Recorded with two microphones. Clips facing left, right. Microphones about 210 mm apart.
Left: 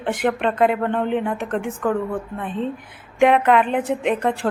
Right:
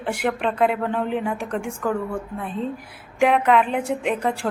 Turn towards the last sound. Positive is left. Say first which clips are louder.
# left 2 dB
turn(degrees=0)  # may be behind; listen again after turning